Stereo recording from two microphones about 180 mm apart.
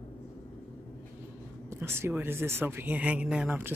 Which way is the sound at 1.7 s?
15° right (ahead or behind).